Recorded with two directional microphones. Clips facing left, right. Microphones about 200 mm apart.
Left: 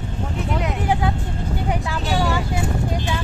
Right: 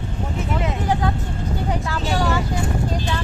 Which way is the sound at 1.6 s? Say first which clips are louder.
Even; 15° left (ahead or behind).